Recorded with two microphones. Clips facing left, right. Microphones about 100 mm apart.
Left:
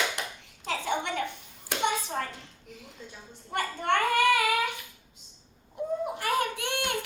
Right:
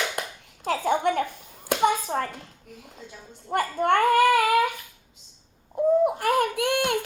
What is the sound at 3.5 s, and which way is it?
A woman's voice, 45° right (ahead or behind).